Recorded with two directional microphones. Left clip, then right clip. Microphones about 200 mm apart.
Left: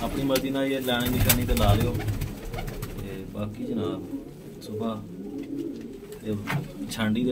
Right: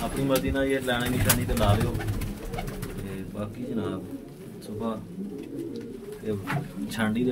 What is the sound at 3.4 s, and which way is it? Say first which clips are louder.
Speech: left 2 dB; centre (ahead or behind).